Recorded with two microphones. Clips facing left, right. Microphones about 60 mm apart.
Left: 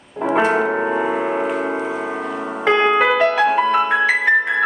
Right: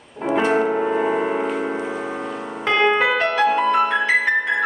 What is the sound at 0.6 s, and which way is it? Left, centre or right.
Music, left.